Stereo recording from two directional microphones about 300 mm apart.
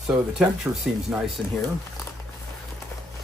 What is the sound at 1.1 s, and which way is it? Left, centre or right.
Speech, centre.